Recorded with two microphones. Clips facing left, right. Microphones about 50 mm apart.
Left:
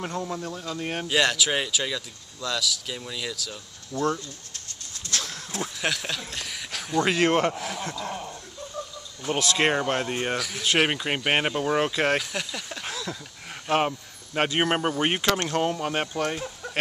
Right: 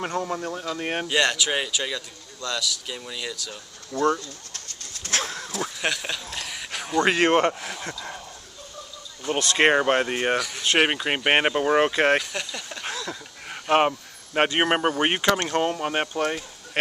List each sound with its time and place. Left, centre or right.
0.2 s speech: right
1.0 s speech: centre
3.9 s speech: right
5.0 s a sound: right
5.8 s speech: centre
7.4 s speech: centre
9.2 s speech: centre
9.6 s speech: right
10.4 s speech: centre
10.8 s speech: centre
12.2 s speech: centre
13.1 s a sound: centre
13.7 s speech: right